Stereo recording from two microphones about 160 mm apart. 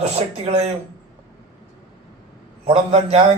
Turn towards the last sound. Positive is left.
turn(degrees=-35)  # may be behind; listen again after turning